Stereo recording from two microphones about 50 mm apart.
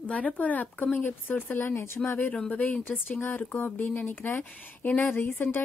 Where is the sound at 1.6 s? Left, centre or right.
Left.